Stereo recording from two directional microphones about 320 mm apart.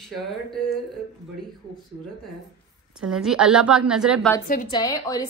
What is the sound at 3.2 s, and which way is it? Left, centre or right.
A woman's voice, centre.